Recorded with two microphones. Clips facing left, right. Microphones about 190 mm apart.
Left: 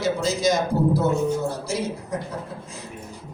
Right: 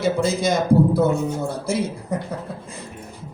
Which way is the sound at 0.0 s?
55° right (ahead or behind).